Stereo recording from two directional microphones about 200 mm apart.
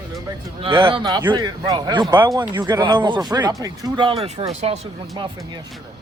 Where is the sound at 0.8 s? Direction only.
25° right (ahead or behind).